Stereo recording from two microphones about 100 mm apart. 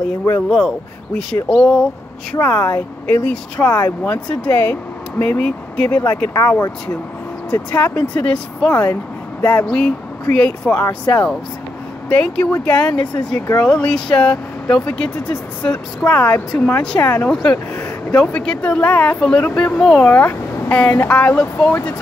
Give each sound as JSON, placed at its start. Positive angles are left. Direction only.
{"t": 0.5, "sound": "speech", "side_deg": 5}
{"t": 2.3, "sound": "speech", "side_deg": 25}
{"t": 7.7, "sound": "speech", "side_deg": 15}